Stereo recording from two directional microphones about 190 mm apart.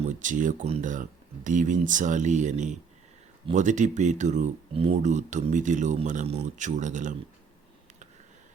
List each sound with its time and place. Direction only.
0.2 s speech: 40° right (ahead or behind)